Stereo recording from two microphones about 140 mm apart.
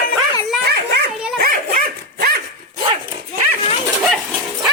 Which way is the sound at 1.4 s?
90° right.